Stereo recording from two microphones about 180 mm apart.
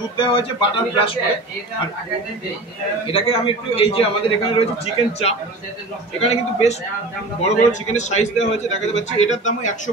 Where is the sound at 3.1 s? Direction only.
30° left (ahead or behind).